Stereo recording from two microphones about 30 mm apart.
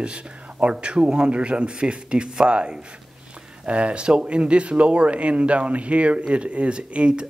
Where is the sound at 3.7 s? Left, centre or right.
Right.